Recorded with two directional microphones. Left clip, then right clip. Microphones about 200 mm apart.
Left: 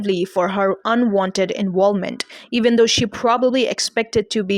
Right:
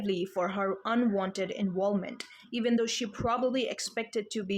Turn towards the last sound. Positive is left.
turn(degrees=45)  # may be behind; listen again after turning